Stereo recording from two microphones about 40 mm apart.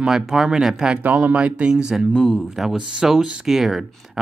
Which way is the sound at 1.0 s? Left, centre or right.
Right.